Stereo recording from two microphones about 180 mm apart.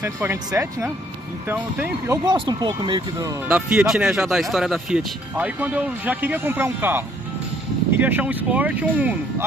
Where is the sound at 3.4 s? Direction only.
10° right (ahead or behind).